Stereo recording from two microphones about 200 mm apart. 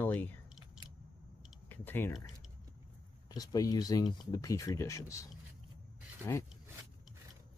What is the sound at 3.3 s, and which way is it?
Speech, 20° left (ahead or behind).